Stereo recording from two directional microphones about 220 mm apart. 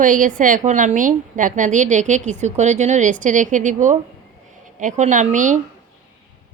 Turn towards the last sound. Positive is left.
turn(degrees=-35)  # may be behind; listen again after turning